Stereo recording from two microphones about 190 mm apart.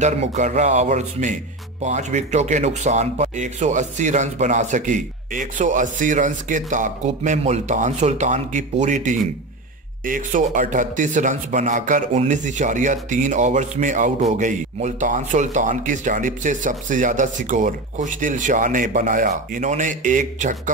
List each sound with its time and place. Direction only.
0.0 s speech: 40° right (ahead or behind)